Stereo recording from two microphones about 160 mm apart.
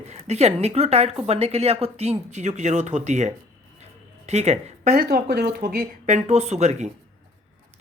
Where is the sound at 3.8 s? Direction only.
45° right (ahead or behind).